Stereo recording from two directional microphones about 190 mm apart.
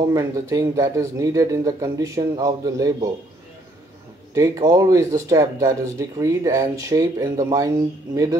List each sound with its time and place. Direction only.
0.0 s speech: 15° right (ahead or behind)
4.3 s speech: 15° right (ahead or behind)